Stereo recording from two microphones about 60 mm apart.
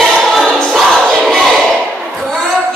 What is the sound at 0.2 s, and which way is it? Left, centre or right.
Choir, centre.